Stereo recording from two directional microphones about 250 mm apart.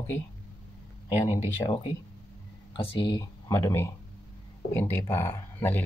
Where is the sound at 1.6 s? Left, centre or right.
Centre.